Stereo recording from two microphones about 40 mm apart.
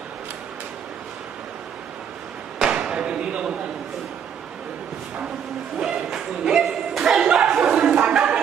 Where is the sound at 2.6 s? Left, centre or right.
Right.